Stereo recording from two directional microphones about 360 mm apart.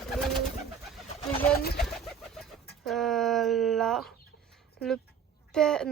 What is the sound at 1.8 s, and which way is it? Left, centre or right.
Bird, centre.